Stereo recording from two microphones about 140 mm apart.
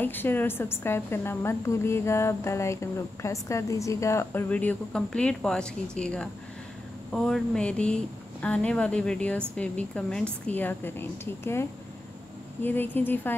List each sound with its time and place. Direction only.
0.0 s a woman's voice: 15° left (ahead or behind)
12.6 s a woman's voice: 15° left (ahead or behind)